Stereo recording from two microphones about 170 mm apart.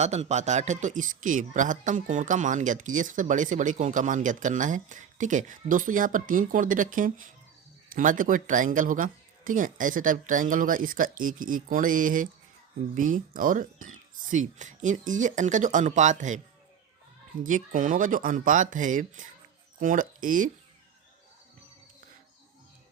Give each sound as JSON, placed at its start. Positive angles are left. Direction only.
{"t": 0.0, "sound": "speech", "side_deg": -40}
{"t": 17.4, "sound": "speech", "side_deg": -50}